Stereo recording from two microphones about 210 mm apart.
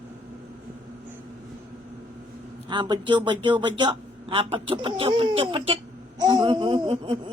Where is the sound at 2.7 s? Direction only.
20° right (ahead or behind).